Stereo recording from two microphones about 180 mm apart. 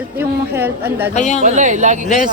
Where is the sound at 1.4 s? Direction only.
40° right (ahead or behind).